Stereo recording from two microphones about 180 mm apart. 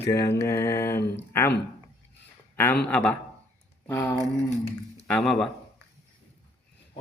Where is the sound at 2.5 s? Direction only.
10° left (ahead or behind).